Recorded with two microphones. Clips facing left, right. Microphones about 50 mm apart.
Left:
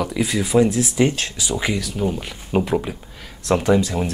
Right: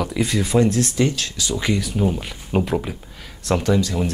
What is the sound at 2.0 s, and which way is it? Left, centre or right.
Speech, centre.